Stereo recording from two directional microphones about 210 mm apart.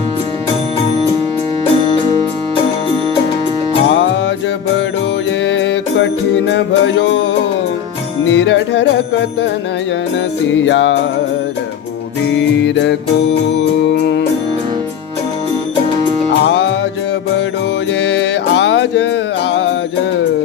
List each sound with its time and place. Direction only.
5.5 s music: 60° left (ahead or behind)
8.3 s music: 60° left (ahead or behind)
10.5 s music: 60° left (ahead or behind)
12.3 s music: 60° left (ahead or behind)
16.3 s music: 55° left (ahead or behind)
18.0 s music: 55° left (ahead or behind)